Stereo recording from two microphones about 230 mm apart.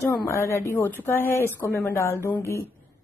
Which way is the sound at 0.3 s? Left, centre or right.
Centre.